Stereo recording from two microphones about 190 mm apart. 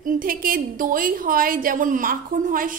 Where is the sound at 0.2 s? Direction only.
50° right (ahead or behind).